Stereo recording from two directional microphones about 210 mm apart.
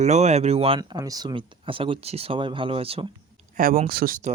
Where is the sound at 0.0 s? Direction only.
35° right (ahead or behind).